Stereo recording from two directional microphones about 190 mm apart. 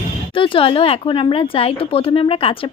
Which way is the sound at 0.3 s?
25° left (ahead or behind).